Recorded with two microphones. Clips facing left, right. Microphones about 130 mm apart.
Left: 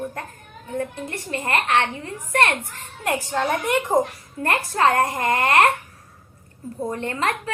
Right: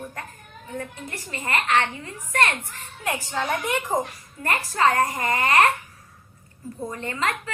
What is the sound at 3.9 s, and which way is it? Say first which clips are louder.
Speech: left 6 dB; 5° left (ahead or behind).